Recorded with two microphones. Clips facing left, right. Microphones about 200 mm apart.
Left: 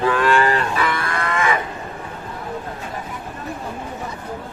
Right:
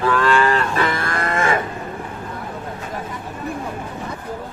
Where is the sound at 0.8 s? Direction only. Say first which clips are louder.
Right 1 dB; 45° right (ahead or behind).